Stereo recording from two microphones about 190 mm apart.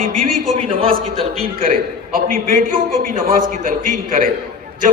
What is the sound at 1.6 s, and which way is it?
A man's voice, 50° right (ahead or behind).